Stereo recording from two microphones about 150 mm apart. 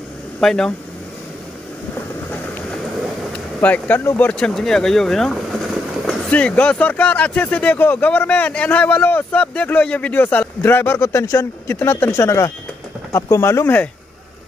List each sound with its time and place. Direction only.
0.4 s speech: 5° left (ahead or behind)
3.3 s speech: 10° left (ahead or behind)